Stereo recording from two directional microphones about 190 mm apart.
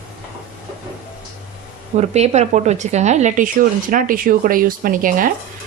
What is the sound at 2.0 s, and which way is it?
Speech, 35° right (ahead or behind).